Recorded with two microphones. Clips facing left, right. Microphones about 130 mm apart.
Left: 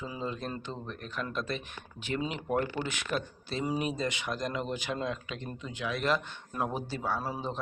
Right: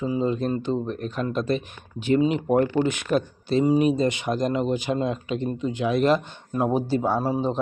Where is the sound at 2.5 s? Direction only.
25° right (ahead or behind).